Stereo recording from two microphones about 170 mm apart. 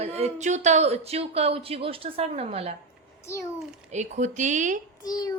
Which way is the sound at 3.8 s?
40° right (ahead or behind).